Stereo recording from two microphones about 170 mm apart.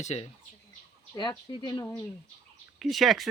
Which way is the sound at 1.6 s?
20° left (ahead or behind).